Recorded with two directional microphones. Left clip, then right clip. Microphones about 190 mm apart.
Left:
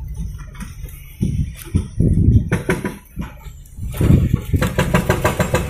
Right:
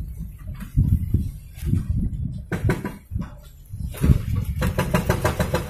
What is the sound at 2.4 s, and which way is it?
Music, 25° left (ahead or behind).